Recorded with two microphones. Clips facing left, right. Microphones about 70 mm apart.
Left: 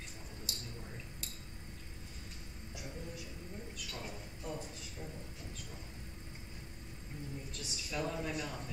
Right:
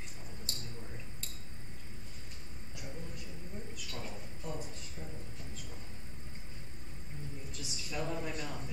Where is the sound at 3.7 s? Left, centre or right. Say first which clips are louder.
Right 1 dB; centre.